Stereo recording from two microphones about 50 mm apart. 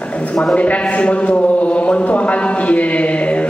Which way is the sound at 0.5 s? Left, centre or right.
Left.